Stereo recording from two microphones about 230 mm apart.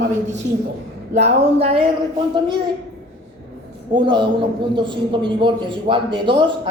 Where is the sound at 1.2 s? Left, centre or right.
Right.